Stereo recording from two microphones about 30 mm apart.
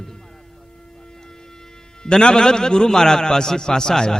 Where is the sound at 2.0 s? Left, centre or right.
Left.